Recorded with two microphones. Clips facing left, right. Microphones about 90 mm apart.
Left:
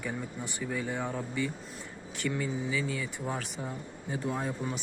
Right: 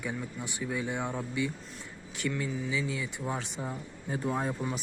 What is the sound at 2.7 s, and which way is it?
Speech, 5° right (ahead or behind).